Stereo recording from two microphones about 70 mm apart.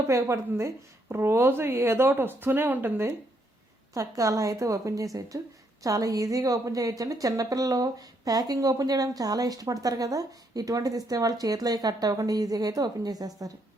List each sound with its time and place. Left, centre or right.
0.1 s a woman's voice: right
3.9 s a woman's voice: right